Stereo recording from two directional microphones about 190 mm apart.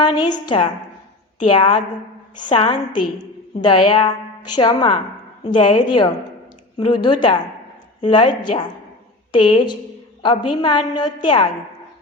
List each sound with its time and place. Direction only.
0.0 s a woman's voice: 25° left (ahead or behind)